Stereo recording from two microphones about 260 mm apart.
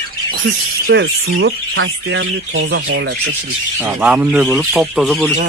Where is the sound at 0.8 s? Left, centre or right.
Right.